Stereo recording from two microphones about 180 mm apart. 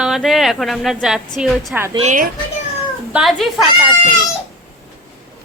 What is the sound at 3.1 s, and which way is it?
Speech, centre (ahead or behind).